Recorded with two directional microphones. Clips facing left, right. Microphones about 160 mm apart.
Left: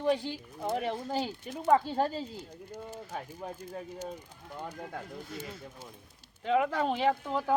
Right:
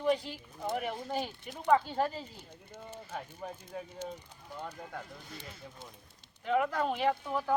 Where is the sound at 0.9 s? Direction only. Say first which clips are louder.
Left 3 dB; 35° left (ahead or behind).